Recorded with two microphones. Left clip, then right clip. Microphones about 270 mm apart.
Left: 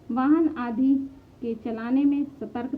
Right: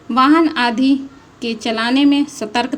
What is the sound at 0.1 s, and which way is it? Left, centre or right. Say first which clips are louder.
A woman's voice: right 10 dB; centre.